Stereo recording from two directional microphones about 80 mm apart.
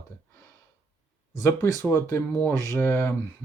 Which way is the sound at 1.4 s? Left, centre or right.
Left.